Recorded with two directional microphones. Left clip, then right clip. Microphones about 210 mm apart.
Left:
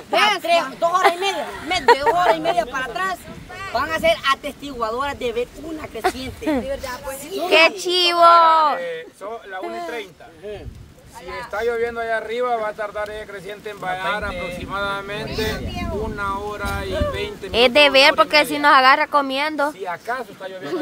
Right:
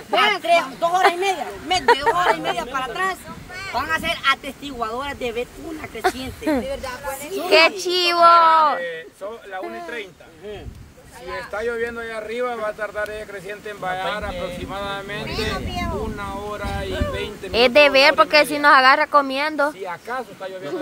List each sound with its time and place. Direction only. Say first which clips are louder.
0.4 s speech: even; 5° left (ahead or behind)
6.6 s speech: even; 20° right (ahead or behind)
7.4 s speech: even; centre (ahead or behind)
11.5 s speech: left 4 dB; 5° left (ahead or behind)
15.2 s speech: even; 35° right (ahead or behind)
16.2 s speech: left 4 dB; 5° left (ahead or behind)